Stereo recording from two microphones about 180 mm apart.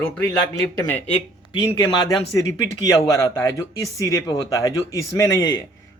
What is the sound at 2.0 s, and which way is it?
A man's voice, 20° left (ahead or behind).